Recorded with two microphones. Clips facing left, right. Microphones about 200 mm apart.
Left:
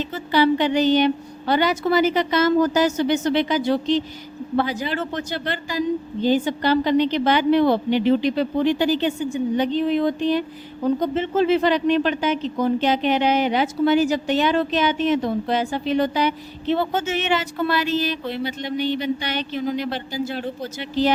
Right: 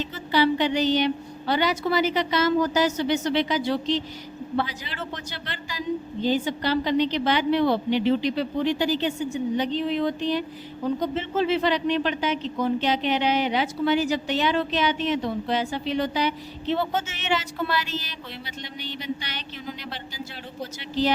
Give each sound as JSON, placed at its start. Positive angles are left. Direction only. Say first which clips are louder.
{"t": 0.1, "sound": "speech", "louder": "left 4 dB", "side_deg": 50}